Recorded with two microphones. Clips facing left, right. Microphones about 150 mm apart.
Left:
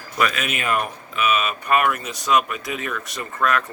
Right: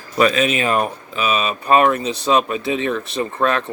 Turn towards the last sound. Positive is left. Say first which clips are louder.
# right 4 dB
turn(degrees=-30)  # may be behind; listen again after turning